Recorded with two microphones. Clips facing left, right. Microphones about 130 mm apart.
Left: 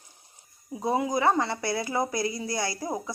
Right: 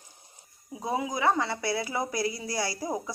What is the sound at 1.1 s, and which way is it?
A woman's voice, centre (ahead or behind).